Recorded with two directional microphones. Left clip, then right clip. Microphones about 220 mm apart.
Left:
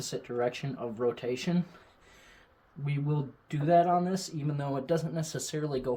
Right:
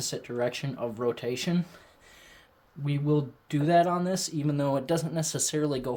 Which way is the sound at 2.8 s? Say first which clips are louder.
Right 7 dB; 40° right (ahead or behind).